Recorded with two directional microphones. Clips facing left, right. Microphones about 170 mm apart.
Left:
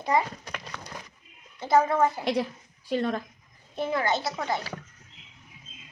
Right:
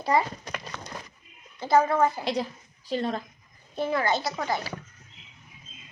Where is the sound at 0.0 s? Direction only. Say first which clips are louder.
Right 1 dB; 20° left (ahead or behind).